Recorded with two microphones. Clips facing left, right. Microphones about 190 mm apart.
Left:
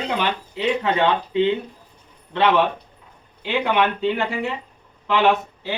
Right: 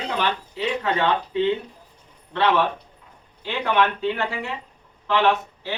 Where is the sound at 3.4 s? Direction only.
15° left (ahead or behind).